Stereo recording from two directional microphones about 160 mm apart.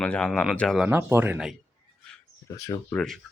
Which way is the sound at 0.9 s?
15° right (ahead or behind).